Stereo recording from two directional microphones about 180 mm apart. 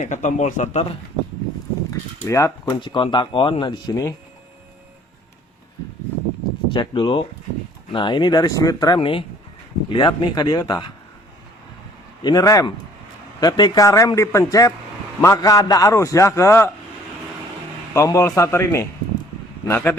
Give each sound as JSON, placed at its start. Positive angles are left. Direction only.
{"t": 0.0, "sound": "speech", "side_deg": 45}
{"t": 1.9, "sound": "speech", "side_deg": 15}
{"t": 2.8, "sound": "a man's voice", "side_deg": 25}
{"t": 6.7, "sound": "a man's voice", "side_deg": 25}
{"t": 12.2, "sound": "a man's voice", "side_deg": 20}
{"t": 17.9, "sound": "a man's voice", "side_deg": 15}